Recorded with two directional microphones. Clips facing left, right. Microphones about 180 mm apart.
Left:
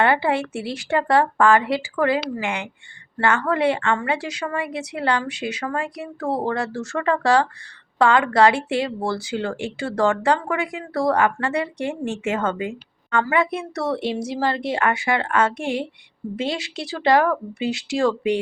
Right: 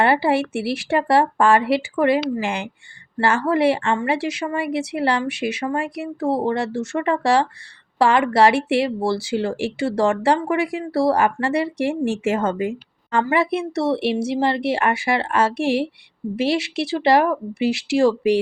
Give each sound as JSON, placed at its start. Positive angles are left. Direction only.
{"t": 0.0, "sound": "speech", "side_deg": -30}